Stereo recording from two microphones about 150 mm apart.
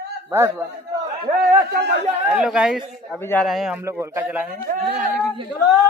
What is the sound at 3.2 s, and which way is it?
Speech, 15° left (ahead or behind).